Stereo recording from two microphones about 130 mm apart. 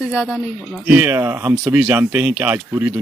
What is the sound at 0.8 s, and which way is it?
A woman's voice, 15° right (ahead or behind).